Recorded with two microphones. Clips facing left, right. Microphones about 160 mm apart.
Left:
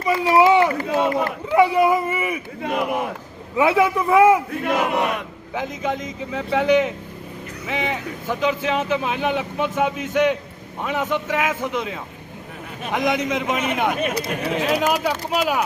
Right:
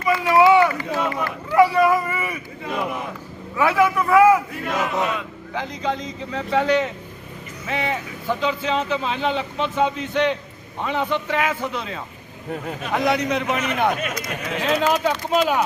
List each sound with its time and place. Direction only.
0.0 s run: 30° left (ahead or behind)
1.5 s speech: 20° left (ahead or behind)
2.6 s battle cry: 60° left (ahead or behind)
3.6 s speech: 20° left (ahead or behind)
4.6 s battle cry: 60° left (ahead or behind)
5.5 s speech: 15° left (ahead or behind)
14.0 s speech: 30° left (ahead or behind)
14.7 s speech: 10° left (ahead or behind)